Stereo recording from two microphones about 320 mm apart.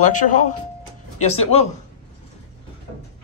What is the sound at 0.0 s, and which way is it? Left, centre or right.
Speech, left.